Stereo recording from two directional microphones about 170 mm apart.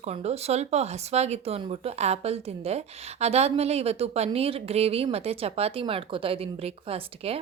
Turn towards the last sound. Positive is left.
turn(degrees=-35)  # may be behind; listen again after turning